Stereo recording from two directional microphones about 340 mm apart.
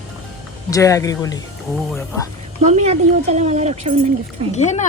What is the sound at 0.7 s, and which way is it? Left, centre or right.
Speech, centre.